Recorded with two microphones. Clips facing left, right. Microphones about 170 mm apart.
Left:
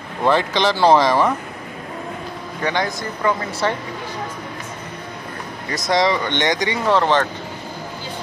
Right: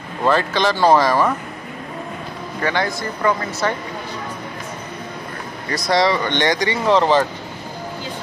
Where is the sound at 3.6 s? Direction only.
25° left (ahead or behind).